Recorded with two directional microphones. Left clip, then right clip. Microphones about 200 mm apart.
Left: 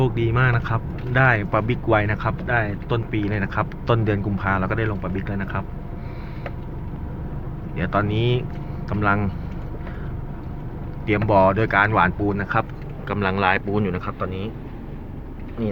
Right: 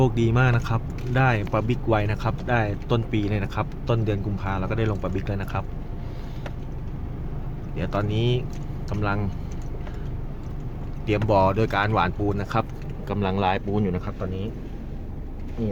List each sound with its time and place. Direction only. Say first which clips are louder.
0.0 s speech: left 1 dB; 20° right (ahead or behind)
2.5 s speech: left 1 dB; 20° right (ahead or behind); by 4.8 s 5° right (ahead or behind)
4.8 s speech: left 1 dB; 25° right (ahead or behind)
7.8 s speech: left 4 dB; 10° right (ahead or behind)
11.0 s speech: left 3 dB; 10° right (ahead or behind)
15.6 s speech: left 3 dB; 10° right (ahead or behind)